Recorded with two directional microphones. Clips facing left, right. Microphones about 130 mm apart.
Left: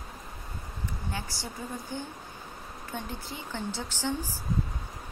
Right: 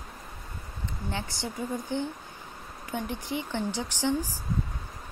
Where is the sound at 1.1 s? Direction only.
20° right (ahead or behind).